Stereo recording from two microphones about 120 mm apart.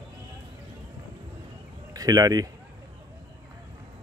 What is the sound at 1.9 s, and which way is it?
Speech, 30° right (ahead or behind).